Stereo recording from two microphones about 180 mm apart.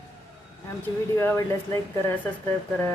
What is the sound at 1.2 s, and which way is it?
A woman's voice, 15° left (ahead or behind).